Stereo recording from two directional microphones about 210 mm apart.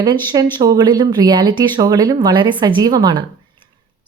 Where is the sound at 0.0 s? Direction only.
20° right (ahead or behind).